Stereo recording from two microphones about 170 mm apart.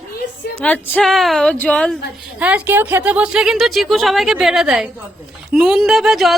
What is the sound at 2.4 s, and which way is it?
Speech, 10° right (ahead or behind).